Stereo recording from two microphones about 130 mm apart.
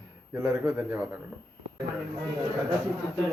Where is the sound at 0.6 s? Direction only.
15° right (ahead or behind).